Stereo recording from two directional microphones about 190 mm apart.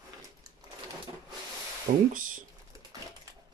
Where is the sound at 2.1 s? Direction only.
45° right (ahead or behind).